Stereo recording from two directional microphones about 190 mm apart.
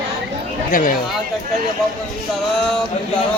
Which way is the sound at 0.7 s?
45° left (ahead or behind).